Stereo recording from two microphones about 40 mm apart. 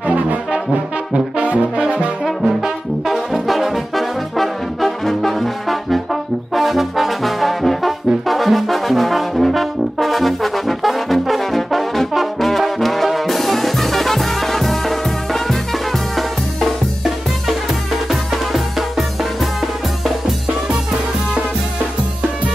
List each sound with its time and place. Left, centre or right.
1.1 s brass instrument: right
2.4 s brass instrument: centre
3.4 s brass instrument: centre
16.2 s music: centre